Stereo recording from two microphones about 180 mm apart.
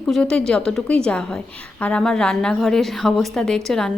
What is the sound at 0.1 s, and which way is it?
A woman's voice, 5° left (ahead or behind).